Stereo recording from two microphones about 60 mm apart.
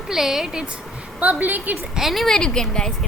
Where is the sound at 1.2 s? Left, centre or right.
Right.